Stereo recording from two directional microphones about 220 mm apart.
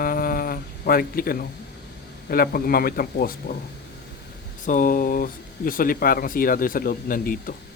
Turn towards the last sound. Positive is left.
turn(degrees=40)  # may be behind; listen again after turning